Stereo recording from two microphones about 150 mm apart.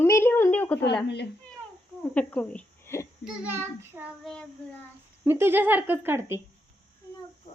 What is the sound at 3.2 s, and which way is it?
Speech, 10° right (ahead or behind).